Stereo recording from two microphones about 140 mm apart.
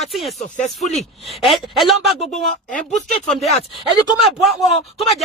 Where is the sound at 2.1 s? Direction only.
50° left (ahead or behind).